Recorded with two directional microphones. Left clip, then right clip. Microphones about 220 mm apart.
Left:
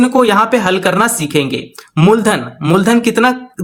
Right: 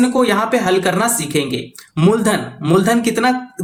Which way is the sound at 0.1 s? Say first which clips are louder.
Left 5 dB; 35° left (ahead or behind).